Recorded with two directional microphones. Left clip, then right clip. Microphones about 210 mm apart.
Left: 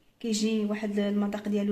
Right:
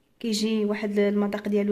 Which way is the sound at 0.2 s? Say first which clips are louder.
Right 3 dB; 40° right (ahead or behind).